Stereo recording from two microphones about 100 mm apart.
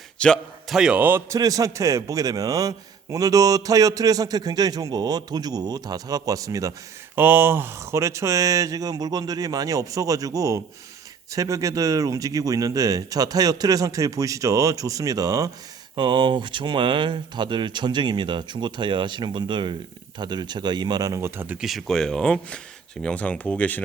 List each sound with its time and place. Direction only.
0.2 s speech: 10° left (ahead or behind)
0.7 s a man's voice: 5° right (ahead or behind)
1.3 s a man's voice: 35° right (ahead or behind)
7.2 s a man's voice: 20° right (ahead or behind); by 15.4 s 40° right (ahead or behind)
16.0 s speech: 50° right (ahead or behind); by 21.6 s 20° right (ahead or behind)
21.6 s speech: centre (ahead or behind); by 23.8 s 15° left (ahead or behind)